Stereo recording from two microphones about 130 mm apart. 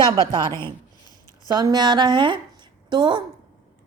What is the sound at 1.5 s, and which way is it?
A woman's voice, 30° right (ahead or behind).